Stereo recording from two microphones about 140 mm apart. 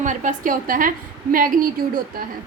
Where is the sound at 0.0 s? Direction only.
65° right (ahead or behind); by 1.6 s 80° right.